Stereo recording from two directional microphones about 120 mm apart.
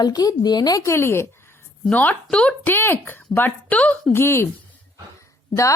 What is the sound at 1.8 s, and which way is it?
Speech, 10° left (ahead or behind).